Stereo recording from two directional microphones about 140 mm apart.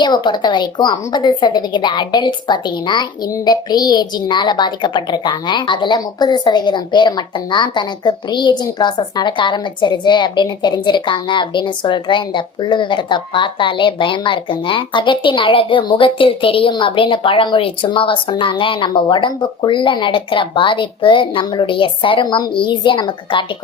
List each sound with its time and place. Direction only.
0.0 s a woman's voice: 30° left (ahead or behind)